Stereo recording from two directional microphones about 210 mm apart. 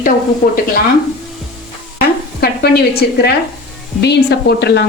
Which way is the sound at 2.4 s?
50° left (ahead or behind).